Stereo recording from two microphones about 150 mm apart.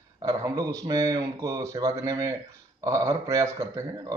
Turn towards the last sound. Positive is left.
turn(degrees=-25)  # may be behind; listen again after turning